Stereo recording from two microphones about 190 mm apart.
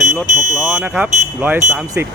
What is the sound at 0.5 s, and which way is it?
Speech, 5° right (ahead or behind).